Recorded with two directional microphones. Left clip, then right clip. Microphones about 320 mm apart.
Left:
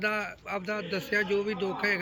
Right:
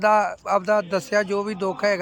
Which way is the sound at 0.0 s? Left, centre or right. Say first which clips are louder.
Right 12 dB; centre.